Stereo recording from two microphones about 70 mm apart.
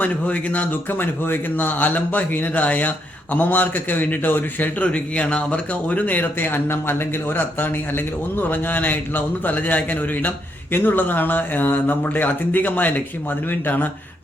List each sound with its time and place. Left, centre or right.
0.0 s a man's voice: left